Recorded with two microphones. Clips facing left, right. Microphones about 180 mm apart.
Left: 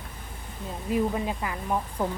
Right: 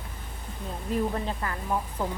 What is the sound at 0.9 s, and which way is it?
Speech, 10° left (ahead or behind).